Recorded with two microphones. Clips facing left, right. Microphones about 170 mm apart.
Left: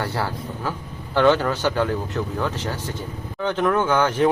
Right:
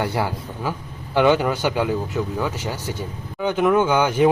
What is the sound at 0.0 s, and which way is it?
Speech, 15° right (ahead or behind).